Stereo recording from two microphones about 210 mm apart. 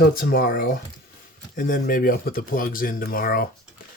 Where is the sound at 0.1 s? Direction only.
45° left (ahead or behind).